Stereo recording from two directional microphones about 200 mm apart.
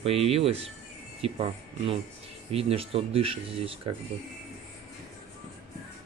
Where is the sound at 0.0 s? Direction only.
30° right (ahead or behind).